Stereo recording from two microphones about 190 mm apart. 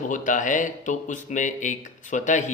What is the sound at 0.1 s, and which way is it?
Speech, 40° left (ahead or behind).